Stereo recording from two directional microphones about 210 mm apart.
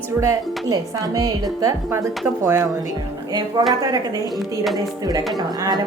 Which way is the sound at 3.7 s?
20° right (ahead or behind).